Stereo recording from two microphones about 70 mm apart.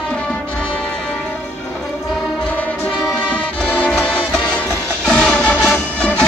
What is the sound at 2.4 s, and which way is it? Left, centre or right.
Music, left.